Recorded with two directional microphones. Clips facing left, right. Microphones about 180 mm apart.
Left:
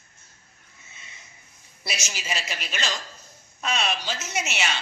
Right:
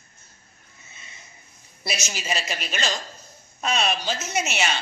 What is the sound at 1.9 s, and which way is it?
A woman's voice, 40° right (ahead or behind).